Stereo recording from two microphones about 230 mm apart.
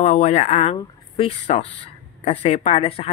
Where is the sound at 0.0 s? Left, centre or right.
Left.